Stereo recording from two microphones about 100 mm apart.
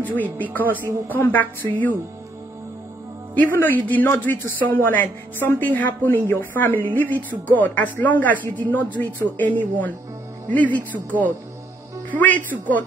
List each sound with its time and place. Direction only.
0.1 s speech: 15° left (ahead or behind)
3.3 s a woman's voice: 20° left (ahead or behind)